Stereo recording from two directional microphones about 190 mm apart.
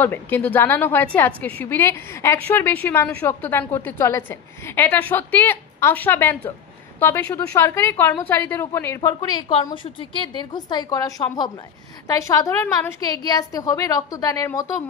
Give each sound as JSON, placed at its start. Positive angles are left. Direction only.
{"t": 0.0, "sound": "a woman's voice", "side_deg": 10}